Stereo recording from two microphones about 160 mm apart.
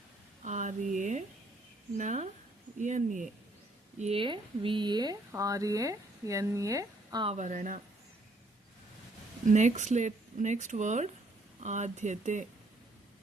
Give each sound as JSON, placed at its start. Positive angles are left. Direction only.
{"t": 0.4, "sound": "a sound", "side_deg": -50}
{"t": 2.0, "sound": "speech", "side_deg": -50}
{"t": 4.0, "sound": "speech", "side_deg": -35}
{"t": 7.3, "sound": "speech", "side_deg": -50}
{"t": 9.5, "sound": "speech", "side_deg": -50}